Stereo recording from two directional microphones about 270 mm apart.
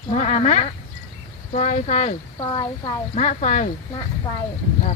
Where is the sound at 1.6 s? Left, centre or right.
Left.